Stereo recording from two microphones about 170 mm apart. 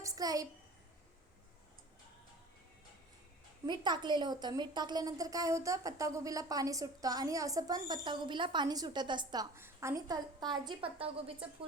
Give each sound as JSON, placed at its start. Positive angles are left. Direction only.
{"t": 0.0, "sound": "a child's voice", "side_deg": -20}
{"t": 3.7, "sound": "a woman's voice", "side_deg": -25}